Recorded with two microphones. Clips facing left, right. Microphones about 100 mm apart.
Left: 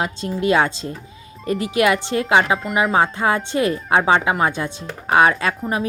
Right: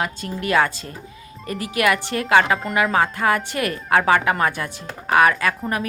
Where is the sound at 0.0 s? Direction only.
25° left (ahead or behind).